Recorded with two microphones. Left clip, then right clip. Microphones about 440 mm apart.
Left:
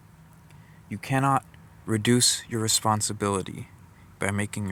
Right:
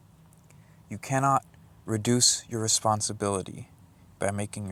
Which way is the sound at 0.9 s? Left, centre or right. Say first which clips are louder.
Even; right.